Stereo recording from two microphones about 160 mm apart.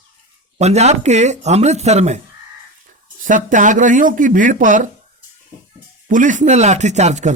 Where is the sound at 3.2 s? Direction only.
55° right (ahead or behind).